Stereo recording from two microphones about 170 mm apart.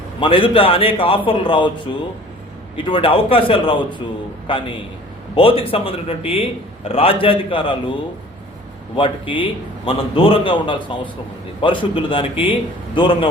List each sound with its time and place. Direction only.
0.2 s a man's voice: 30° left (ahead or behind)
2.7 s a man's voice: 30° left (ahead or behind)
9.0 s a man's voice: 30° left (ahead or behind)